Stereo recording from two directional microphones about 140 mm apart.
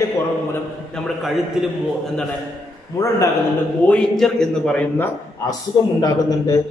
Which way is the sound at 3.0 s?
20° left (ahead or behind).